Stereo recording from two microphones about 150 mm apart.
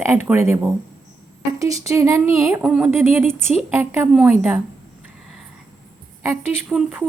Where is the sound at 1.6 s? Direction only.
20° right (ahead or behind).